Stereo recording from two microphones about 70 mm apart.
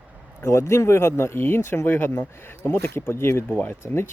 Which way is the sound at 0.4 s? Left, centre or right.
Left.